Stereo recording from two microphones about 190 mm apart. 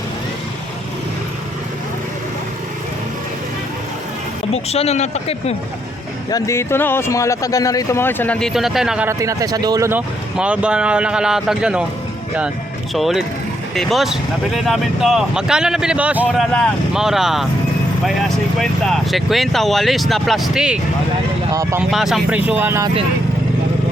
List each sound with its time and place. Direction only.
4.5 s speech: 35° left (ahead or behind)
6.3 s speech: 15° left (ahead or behind); by 9.0 s 5° right (ahead or behind)
9.0 s speech: 15° right (ahead or behind)
10.3 s speech: 5° right (ahead or behind)
12.9 s speech: centre (ahead or behind)
21.5 s speech: 15° right (ahead or behind)
21.8 s speech: centre (ahead or behind)